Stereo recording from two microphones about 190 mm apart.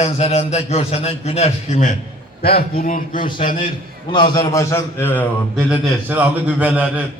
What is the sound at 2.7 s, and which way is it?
Speech, 45° left (ahead or behind).